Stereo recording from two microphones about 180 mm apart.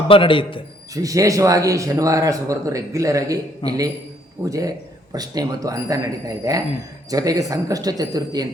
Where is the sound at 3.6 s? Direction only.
30° left (ahead or behind).